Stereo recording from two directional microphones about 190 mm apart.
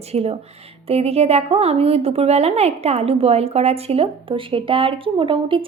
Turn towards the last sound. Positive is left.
turn(degrees=-30)  # may be behind; listen again after turning